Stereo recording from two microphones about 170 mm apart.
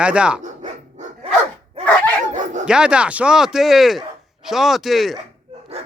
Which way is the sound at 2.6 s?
5° right (ahead or behind).